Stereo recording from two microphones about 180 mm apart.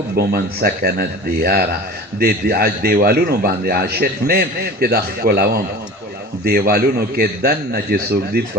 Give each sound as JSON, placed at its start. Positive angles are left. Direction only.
{"t": 0.2, "sound": "a man's voice", "side_deg": -60}